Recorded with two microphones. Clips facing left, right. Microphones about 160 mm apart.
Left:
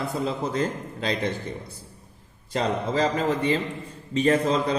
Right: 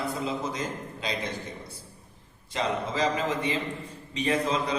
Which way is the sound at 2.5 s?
40° left (ahead or behind).